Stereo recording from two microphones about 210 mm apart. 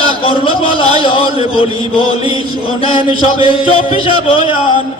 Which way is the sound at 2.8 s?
25° left (ahead or behind).